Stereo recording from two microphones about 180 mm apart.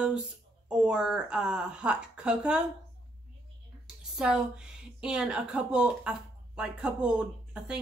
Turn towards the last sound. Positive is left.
turn(degrees=-5)  # may be behind; listen again after turning